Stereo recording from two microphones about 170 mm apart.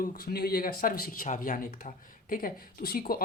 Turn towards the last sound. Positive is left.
turn(degrees=60)  # may be behind; listen again after turning